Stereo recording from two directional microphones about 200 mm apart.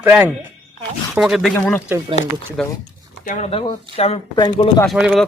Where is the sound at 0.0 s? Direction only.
10° right (ahead or behind).